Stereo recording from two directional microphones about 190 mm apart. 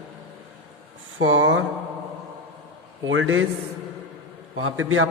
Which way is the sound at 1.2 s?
90° right.